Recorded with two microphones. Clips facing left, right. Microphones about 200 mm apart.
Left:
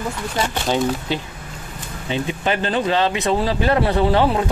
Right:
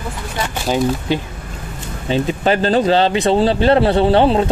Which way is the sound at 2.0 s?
35° right (ahead or behind).